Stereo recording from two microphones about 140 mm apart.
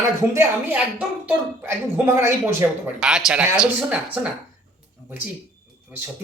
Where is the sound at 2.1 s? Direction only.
20° right (ahead or behind).